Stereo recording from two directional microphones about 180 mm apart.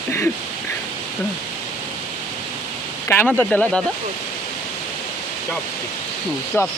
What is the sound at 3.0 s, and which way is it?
Speech, 10° left (ahead or behind).